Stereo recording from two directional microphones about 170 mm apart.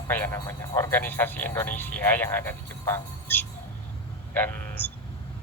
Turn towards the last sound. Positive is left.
turn(degrees=10)  # may be behind; listen again after turning